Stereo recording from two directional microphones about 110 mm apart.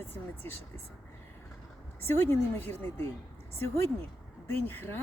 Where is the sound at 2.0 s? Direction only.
20° left (ahead or behind).